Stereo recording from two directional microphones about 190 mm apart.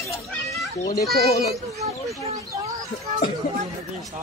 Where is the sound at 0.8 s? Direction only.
15° left (ahead or behind).